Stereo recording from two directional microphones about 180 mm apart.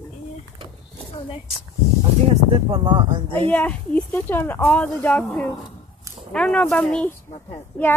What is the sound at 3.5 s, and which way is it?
Speech, 10° left (ahead or behind).